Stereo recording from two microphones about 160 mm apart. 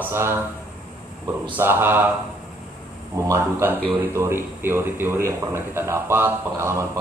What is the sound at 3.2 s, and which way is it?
A man's voice, 20° right (ahead or behind).